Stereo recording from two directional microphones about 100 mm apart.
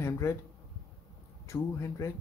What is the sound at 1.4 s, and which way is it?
Speech, 30° left (ahead or behind).